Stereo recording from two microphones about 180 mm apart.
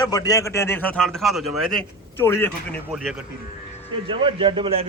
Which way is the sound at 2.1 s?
10° left (ahead or behind).